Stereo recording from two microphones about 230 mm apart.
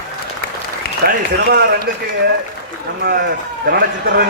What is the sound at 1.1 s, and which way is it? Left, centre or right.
Speech, right.